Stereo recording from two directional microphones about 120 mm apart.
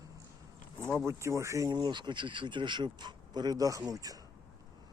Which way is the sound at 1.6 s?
35° right (ahead or behind).